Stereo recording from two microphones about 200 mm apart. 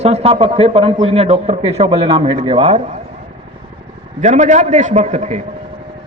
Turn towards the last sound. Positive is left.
turn(degrees=-35)  # may be behind; listen again after turning